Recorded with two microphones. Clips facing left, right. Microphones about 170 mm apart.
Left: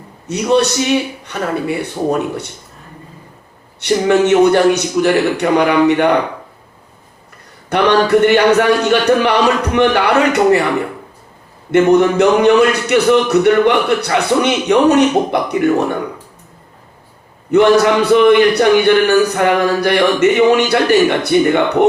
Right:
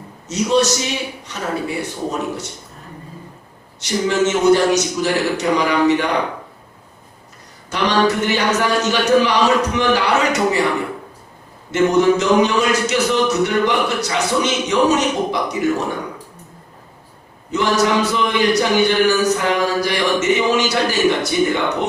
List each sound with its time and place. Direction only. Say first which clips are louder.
0.3 s speech: left 3 dB; 60° left (ahead or behind)
3.8 s speech: left 6 dB; 60° left (ahead or behind)
7.7 s speech: left 6 dB; 60° left (ahead or behind)
11.7 s speech: left 4 dB; 60° left (ahead or behind)
17.5 s speech: left 7 dB; 60° left (ahead or behind)